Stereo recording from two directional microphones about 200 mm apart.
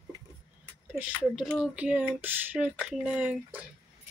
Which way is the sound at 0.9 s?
5° right (ahead or behind).